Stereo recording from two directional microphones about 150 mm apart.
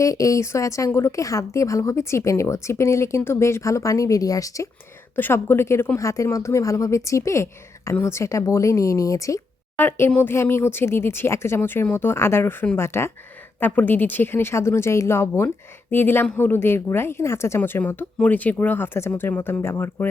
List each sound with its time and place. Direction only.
0.0 s a woman's voice: 20° left (ahead or behind)